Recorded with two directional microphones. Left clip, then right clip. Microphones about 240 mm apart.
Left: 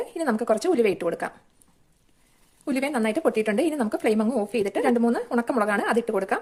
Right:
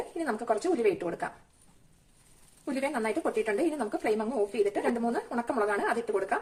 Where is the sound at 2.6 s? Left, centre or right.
Left.